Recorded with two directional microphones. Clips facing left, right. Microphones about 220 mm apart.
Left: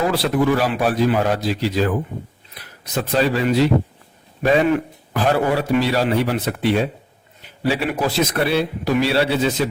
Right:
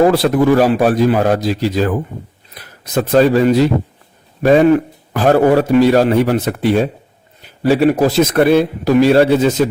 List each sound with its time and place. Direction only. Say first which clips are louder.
0.1 s a man's voice: right 6 dB; 45° right (ahead or behind)